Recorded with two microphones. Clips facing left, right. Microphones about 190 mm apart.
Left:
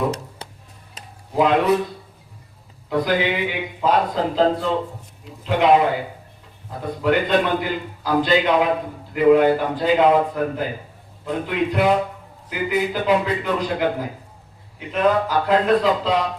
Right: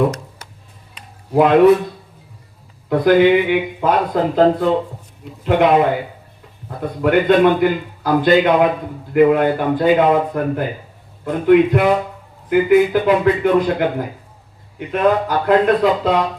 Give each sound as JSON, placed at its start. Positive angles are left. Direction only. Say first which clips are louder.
{"t": 1.3, "sound": "a man's voice", "louder": "right 7 dB", "side_deg": -55}
{"t": 2.9, "sound": "a man's voice", "louder": "right 9 dB", "side_deg": -50}